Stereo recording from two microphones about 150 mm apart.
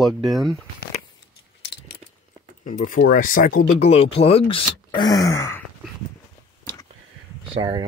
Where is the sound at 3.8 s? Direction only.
40° left (ahead or behind); by 5.6 s 20° left (ahead or behind).